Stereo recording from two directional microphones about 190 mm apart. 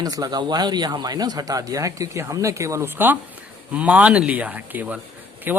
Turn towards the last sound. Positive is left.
turn(degrees=-10)  # may be behind; listen again after turning